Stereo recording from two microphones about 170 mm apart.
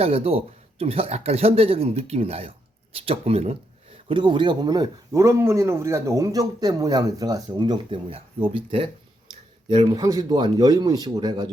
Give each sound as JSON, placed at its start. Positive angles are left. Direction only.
{"t": 0.0, "sound": "speech", "side_deg": -35}